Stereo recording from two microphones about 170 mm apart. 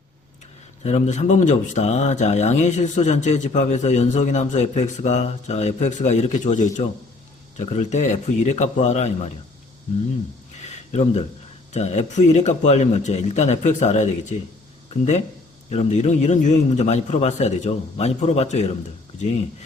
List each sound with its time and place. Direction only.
0.9 s speech: 40° left (ahead or behind)
10.7 s a sound: 40° left (ahead or behind)
11.7 s a man's voice: 40° left (ahead or behind)